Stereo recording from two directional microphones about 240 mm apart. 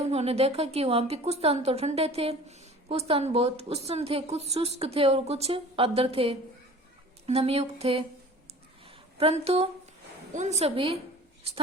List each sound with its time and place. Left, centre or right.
0.0 s a woman's voice: right
9.1 s a woman's voice: right